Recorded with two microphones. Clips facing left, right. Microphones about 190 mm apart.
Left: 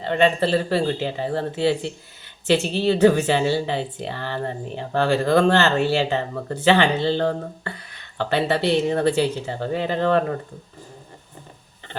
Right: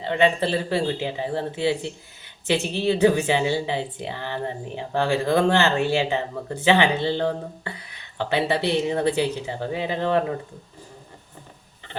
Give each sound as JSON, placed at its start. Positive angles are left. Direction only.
{"t": 0.0, "sound": "a woman's voice", "side_deg": -15}